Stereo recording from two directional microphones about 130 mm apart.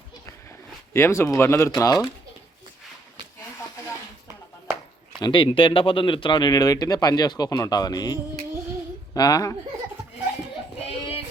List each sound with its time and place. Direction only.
0.9 s speech: 20° left (ahead or behind)
5.2 s speech: 40° left (ahead or behind)
10.8 s a sound: 50° left (ahead or behind)